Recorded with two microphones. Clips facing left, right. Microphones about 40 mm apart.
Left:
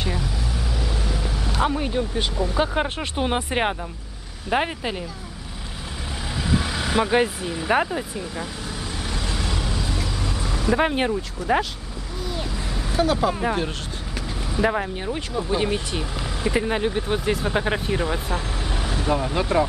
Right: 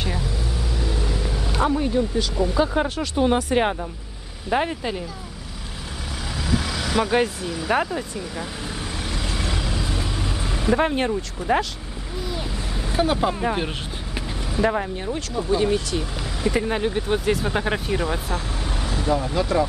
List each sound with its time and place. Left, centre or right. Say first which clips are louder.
1.0 s vehicle: right 1 dB; centre
1.6 s speech: right 1 dB; left
2.0 s speech: right 2 dB; left; by 5.0 s centre
6.5 s vehicle: left 1 dB; left
7.0 s speech: even; centre
9.9 s vehicle: even; right
10.8 s speech: even; centre
12.9 s speech: even; centre
13.3 s speech: even; centre
15.5 s speech: right 4 dB; left
16.6 s speech: even; centre
18.7 s vehicle: even; left
19.0 s speech: right 1 dB; left